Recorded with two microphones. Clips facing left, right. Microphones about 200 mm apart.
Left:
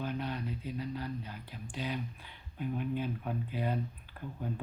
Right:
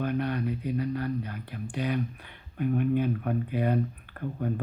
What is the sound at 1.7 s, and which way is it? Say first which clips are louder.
Speech: right 8 dB; 60° right (ahead or behind).